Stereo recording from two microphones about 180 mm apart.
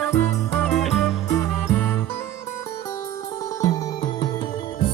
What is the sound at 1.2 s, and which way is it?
Music, 15° left (ahead or behind).